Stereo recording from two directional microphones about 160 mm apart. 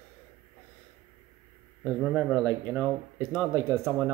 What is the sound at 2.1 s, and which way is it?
Speech, 15° right (ahead or behind).